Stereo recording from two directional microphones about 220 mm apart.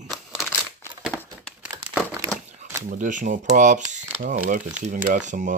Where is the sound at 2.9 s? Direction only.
35° right (ahead or behind).